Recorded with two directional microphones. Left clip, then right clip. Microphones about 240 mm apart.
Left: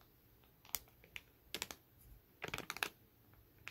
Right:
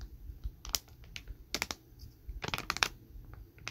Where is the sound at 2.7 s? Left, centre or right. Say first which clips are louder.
Right 12 dB; centre.